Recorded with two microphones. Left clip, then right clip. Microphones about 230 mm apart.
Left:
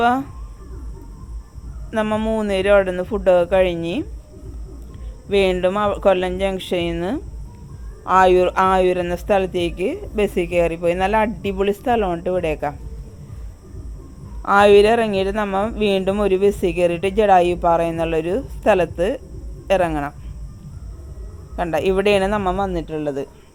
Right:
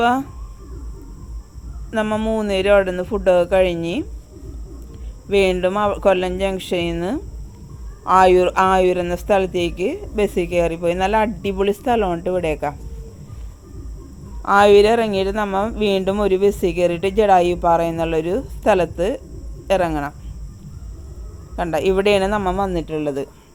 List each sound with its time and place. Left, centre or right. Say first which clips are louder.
0.0 s speech: even; centre
1.9 s speech: even; centre
5.3 s speech: even; centre
14.4 s speech: even; centre
21.5 s speech: right 1 dB; centre